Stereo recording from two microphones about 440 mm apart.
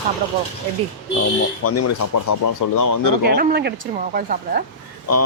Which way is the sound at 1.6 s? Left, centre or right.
Left.